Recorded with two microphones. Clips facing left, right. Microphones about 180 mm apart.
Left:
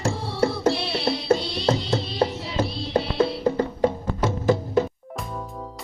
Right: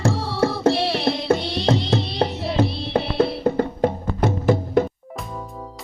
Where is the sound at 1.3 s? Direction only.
75° right (ahead or behind); by 4.8 s 55° right (ahead or behind).